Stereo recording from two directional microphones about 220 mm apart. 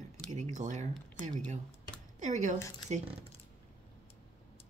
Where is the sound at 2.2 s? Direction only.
35° right (ahead or behind).